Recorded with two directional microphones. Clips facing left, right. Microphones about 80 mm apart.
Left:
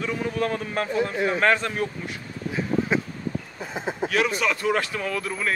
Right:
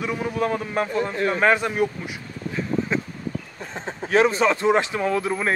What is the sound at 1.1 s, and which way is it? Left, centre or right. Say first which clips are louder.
Speech: right 1 dB; centre.